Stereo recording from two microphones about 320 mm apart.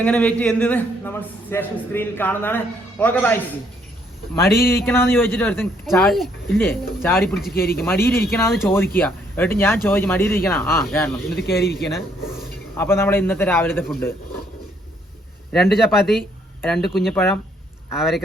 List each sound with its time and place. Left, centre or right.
0.0 s a man's voice: centre
4.5 s a man's voice: centre
7.5 s speech: left
7.9 s speech: centre
11.4 s speech: left
11.8 s speech: centre
15.6 s a man's voice: centre